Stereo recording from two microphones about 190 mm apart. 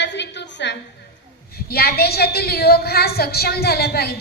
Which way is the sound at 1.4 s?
55° left (ahead or behind).